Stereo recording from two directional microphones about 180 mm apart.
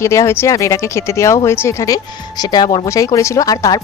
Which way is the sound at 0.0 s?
15° left (ahead or behind).